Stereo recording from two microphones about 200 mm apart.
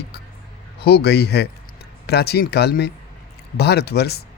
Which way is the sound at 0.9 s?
55° left (ahead or behind).